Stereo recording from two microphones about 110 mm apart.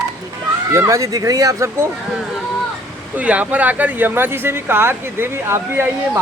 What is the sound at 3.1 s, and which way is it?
Speech, 10° right (ahead or behind).